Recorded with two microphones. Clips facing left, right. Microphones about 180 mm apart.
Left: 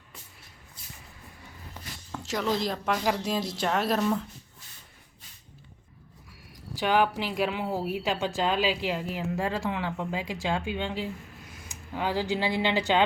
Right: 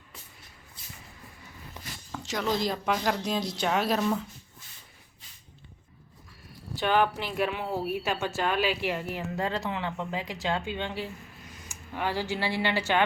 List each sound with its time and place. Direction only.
2.1 s speech: centre (ahead or behind)
6.7 s speech: 10° left (ahead or behind)